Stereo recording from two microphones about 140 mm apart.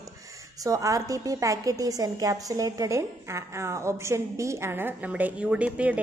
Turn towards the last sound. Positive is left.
turn(degrees=-10)  # may be behind; listen again after turning